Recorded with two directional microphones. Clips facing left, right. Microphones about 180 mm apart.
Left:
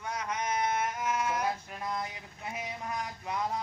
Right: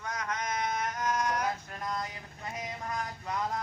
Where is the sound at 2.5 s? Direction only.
10° left (ahead or behind).